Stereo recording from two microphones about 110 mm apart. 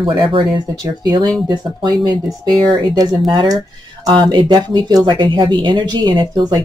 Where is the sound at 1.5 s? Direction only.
40° right (ahead or behind).